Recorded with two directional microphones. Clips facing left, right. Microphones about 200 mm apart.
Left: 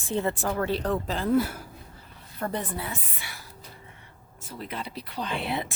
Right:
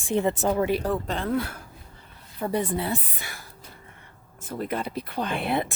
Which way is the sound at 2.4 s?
10° right (ahead or behind).